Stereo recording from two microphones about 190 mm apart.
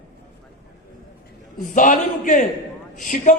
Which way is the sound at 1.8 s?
45° left (ahead or behind).